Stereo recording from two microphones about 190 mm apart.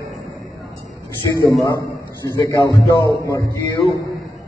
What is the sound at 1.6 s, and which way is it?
A man's voice, 15° left (ahead or behind).